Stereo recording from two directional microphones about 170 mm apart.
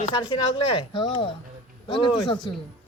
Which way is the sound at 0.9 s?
30° left (ahead or behind).